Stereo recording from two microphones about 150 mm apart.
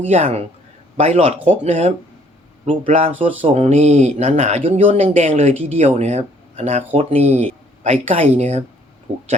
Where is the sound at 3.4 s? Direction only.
40° right (ahead or behind).